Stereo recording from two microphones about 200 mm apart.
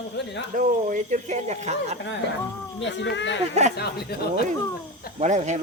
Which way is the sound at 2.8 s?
65° left (ahead or behind).